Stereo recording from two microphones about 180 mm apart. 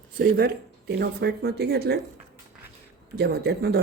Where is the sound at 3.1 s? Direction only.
65° right (ahead or behind).